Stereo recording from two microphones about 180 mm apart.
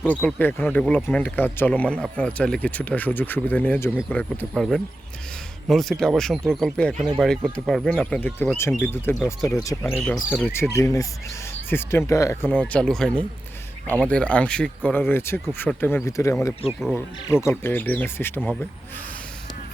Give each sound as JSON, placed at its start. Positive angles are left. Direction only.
{"t": 0.0, "sound": "speech", "side_deg": 10}
{"t": 9.1, "sound": "speech", "side_deg": 0}
{"t": 9.5, "sound": "speech", "side_deg": 15}
{"t": 16.6, "sound": "speech", "side_deg": -5}
{"t": 17.2, "sound": "speech", "side_deg": 15}